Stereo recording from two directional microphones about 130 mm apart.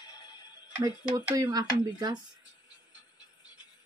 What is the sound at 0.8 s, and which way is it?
Speech, 30° right (ahead or behind).